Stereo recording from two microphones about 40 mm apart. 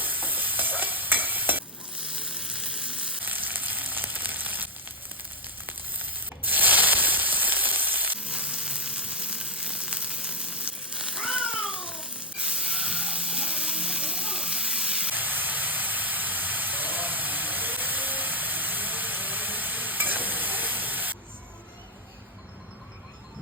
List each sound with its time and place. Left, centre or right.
0.0 s stir: right
2.2 s sizzle: centre
3.2 s frying: right
6.4 s sizzle: right
8.3 s sizzle: right
10.9 s cat: centre
12.5 s music: centre
15.1 s vehicle: right